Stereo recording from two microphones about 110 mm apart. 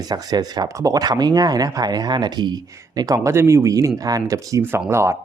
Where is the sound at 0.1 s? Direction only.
40° right (ahead or behind).